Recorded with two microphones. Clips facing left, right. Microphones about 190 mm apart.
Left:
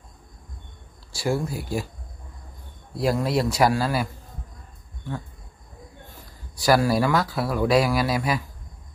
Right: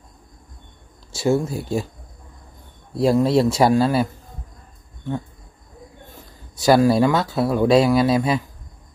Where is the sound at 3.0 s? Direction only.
25° right (ahead or behind).